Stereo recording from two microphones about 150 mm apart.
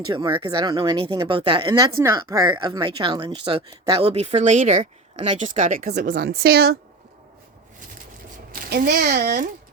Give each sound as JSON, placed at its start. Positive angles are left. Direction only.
{"t": 0.1, "sound": "speech", "side_deg": -30}
{"t": 4.0, "sound": "speech", "side_deg": -40}
{"t": 8.7, "sound": "speech", "side_deg": -90}